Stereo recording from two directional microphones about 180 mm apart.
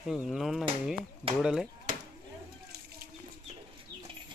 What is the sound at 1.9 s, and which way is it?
Chop, 50° right (ahead or behind).